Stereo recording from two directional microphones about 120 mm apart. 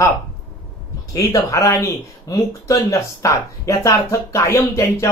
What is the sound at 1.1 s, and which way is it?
Speech, 30° left (ahead or behind).